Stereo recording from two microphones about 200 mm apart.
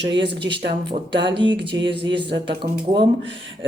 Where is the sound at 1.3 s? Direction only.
25° right (ahead or behind).